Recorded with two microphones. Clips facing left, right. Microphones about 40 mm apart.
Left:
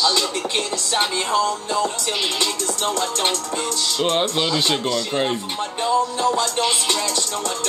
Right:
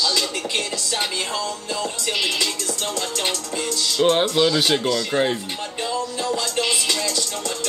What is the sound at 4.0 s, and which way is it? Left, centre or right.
Speech, centre.